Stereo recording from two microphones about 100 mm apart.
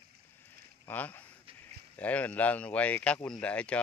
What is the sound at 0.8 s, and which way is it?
Speech, 15° left (ahead or behind).